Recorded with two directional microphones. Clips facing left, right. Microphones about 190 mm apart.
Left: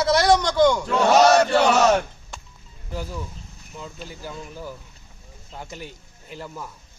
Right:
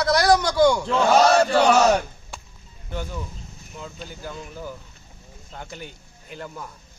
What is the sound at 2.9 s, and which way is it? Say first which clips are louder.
Speech: even; 5° left (ahead or behind).